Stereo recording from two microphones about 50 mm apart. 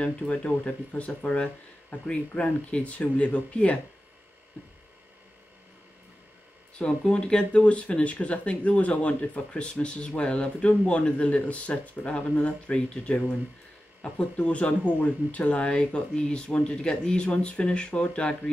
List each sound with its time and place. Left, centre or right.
0.0 s speech: left
6.8 s speech: centre